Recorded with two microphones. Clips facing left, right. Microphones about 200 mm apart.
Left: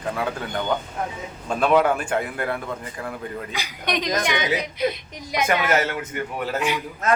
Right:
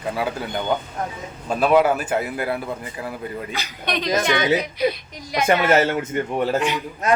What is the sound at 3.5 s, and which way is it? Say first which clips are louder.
Speech: left 2 dB; 15° left (ahead or behind).